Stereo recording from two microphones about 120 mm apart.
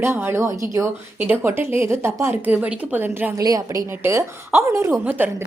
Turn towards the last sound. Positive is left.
turn(degrees=-15)  # may be behind; listen again after turning